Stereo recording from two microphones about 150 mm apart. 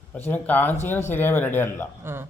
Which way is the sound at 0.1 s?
10° left (ahead or behind).